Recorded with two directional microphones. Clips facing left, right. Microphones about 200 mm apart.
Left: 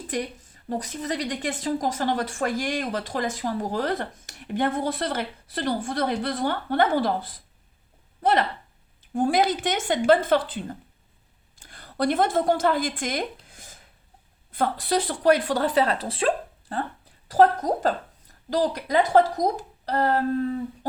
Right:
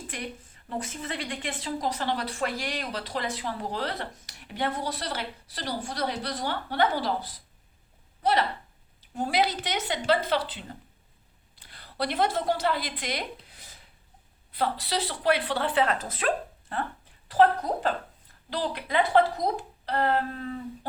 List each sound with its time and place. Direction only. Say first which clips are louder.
0.1 s a woman's voice: left 11 dB; 40° left (ahead or behind)
13.5 s a sound: left 4 dB; 45° left (ahead or behind)
14.5 s a woman's voice: left 5 dB; 50° left (ahead or behind); by 16.8 s 30° left (ahead or behind)
17.2 s a woman's voice: left 3 dB; 40° left (ahead or behind)